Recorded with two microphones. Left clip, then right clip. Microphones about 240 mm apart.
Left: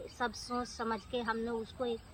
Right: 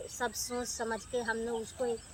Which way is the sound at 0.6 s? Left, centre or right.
Centre.